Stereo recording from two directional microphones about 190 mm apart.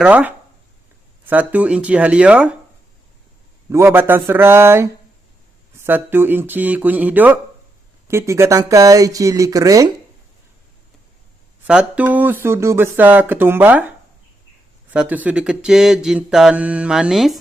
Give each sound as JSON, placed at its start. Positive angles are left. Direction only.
{"t": 0.0, "sound": "speech", "side_deg": -5}
{"t": 3.7, "sound": "speech", "side_deg": -10}
{"t": 11.6, "sound": "speech", "side_deg": -5}
{"t": 14.8, "sound": "mantra", "side_deg": -10}